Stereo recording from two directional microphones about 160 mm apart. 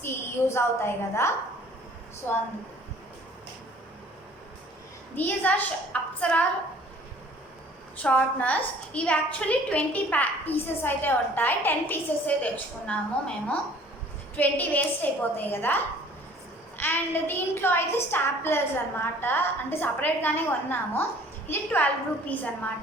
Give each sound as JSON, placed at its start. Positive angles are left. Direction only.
{"t": 0.0, "sound": "a woman's voice", "side_deg": 15}
{"t": 5.1, "sound": "a woman's voice", "side_deg": 10}
{"t": 8.0, "sound": "a woman's voice", "side_deg": 10}